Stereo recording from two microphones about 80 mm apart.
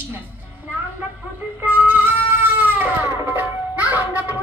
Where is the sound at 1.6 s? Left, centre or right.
Right.